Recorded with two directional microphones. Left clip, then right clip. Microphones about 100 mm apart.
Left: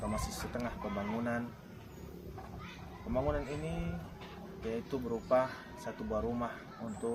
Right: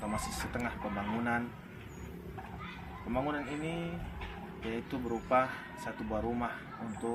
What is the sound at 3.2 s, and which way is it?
Speech, 30° left (ahead or behind).